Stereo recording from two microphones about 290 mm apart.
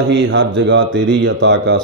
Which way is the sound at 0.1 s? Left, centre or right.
Right.